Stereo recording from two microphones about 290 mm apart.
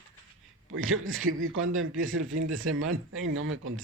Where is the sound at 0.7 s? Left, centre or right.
Right.